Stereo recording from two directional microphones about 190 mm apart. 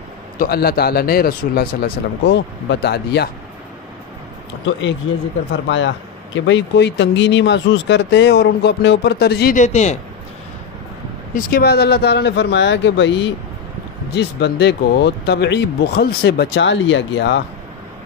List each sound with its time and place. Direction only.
0.4 s speech: 55° left (ahead or behind)
5.7 s speech: 75° left (ahead or behind); by 9.9 s 35° left (ahead or behind)
11.3 s speech: 55° left (ahead or behind)